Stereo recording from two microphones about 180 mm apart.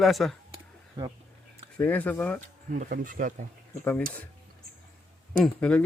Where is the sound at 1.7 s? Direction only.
10° left (ahead or behind).